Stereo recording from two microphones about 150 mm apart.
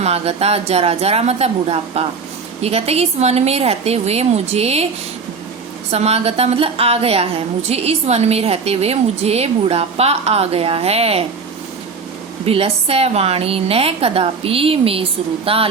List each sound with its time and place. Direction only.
0.0 s a woman's voice: 45° right (ahead or behind)
5.9 s a woman's voice: 45° right (ahead or behind)
12.5 s a woman's voice: 40° right (ahead or behind)